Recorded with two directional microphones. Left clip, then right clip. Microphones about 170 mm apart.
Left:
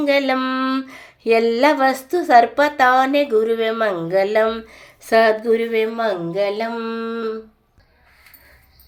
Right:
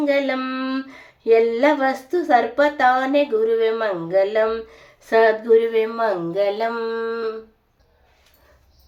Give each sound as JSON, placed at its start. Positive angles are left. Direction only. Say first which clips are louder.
{"t": 0.0, "sound": "speech", "louder": "left 3 dB", "side_deg": 20}